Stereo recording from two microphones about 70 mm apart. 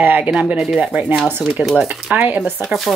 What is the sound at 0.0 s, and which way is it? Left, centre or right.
Speech, right.